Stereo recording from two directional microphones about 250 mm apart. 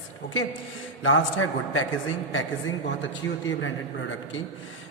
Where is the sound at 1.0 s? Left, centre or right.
Left.